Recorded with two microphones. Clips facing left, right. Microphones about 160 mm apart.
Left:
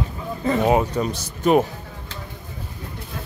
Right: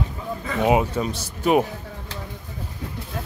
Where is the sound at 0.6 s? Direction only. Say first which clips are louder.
Right 1 dB; 10° right (ahead or behind).